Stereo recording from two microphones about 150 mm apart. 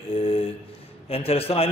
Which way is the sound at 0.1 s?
40° left (ahead or behind).